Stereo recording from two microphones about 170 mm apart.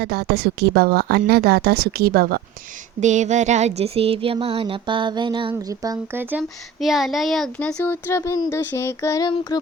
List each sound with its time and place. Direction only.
0.0 s a woman's voice: 70° right (ahead or behind)
3.0 s a sound: 45° right (ahead or behind); by 5.5 s 30° right (ahead or behind)
5.5 s speech: 20° right (ahead or behind)
6.3 s speech: centre (ahead or behind); by 9.3 s 20° left (ahead or behind)
9.5 s child singing: 20° left (ahead or behind)